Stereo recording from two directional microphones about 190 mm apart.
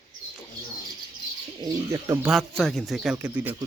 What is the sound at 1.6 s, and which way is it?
Speech, 15° right (ahead or behind).